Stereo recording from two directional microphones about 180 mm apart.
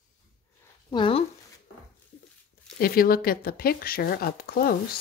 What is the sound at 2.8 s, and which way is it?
Speech, 55° left (ahead or behind).